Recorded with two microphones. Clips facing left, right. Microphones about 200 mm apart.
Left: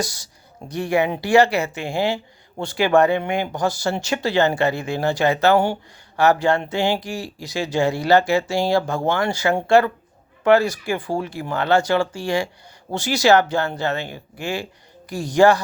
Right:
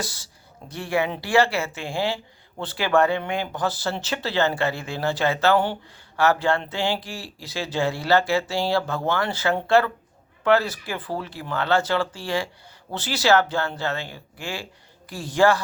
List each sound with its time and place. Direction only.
0.0 s speech: 15° left (ahead or behind)